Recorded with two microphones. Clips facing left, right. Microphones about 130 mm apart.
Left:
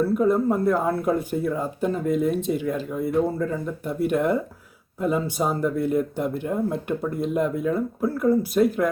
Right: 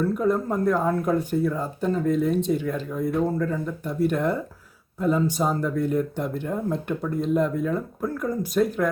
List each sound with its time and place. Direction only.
0.0 s speech: 5° left (ahead or behind)